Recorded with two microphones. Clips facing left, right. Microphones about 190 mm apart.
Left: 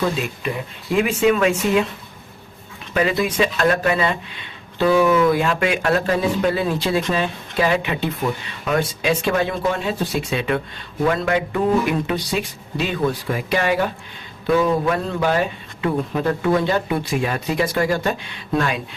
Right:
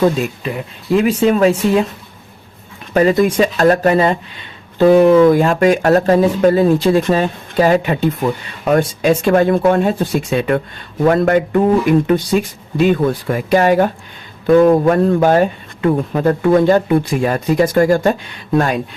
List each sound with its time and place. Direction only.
0.9 s speech: 40° right (ahead or behind)
2.9 s speech: 45° right (ahead or behind)